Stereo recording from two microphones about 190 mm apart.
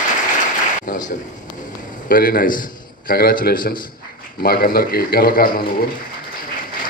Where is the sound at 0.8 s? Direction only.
45° left (ahead or behind).